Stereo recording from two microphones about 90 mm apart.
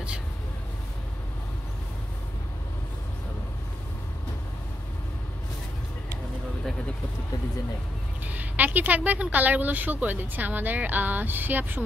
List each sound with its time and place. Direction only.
8.3 s speech: 20° right (ahead or behind)